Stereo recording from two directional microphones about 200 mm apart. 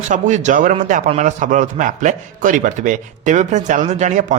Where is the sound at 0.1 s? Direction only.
35° right (ahead or behind).